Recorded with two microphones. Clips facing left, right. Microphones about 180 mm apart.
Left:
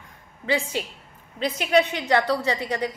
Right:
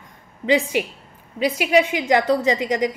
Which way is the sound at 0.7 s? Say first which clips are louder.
Right 7 dB; 15° right (ahead or behind).